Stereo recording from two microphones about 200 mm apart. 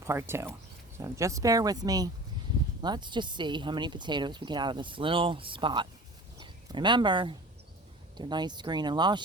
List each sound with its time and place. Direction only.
0.0 s speech: 15° right (ahead or behind)